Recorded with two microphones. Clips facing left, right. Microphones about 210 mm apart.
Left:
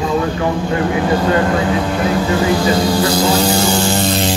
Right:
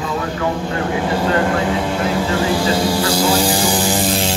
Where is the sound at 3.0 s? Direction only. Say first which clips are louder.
Left 2 dB; 30° right (ahead or behind).